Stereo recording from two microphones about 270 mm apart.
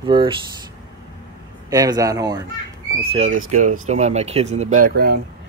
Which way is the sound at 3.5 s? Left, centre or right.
Right.